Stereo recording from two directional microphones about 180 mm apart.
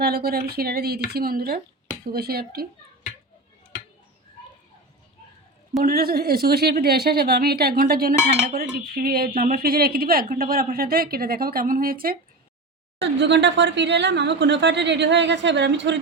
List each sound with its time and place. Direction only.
0.0 s a woman's voice: 60° right (ahead or behind)
5.8 s a woman's voice: 55° right (ahead or behind)
13.0 s speech: 80° right